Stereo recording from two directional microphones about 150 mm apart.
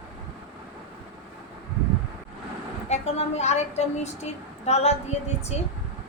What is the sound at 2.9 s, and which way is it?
A woman's voice, 45° left (ahead or behind).